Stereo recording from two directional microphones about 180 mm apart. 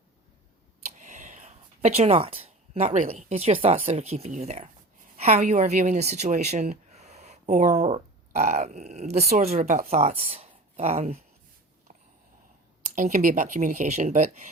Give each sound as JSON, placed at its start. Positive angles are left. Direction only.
{"t": 0.9, "sound": "speech", "side_deg": -40}
{"t": 11.9, "sound": "a sound", "side_deg": -40}
{"t": 13.0, "sound": "speech", "side_deg": -45}